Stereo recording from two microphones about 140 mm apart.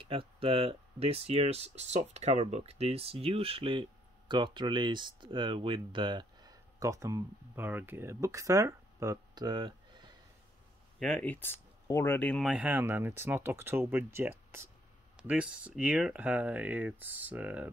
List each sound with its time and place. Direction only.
0.0 s speech: 40° right (ahead or behind)
11.0 s speech: 5° left (ahead or behind)
12.4 s speech: 10° right (ahead or behind)